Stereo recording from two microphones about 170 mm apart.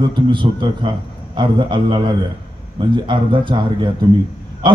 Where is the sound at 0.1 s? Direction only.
25° right (ahead or behind).